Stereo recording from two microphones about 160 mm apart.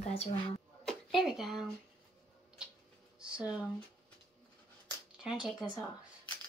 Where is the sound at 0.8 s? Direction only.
Centre (ahead or behind).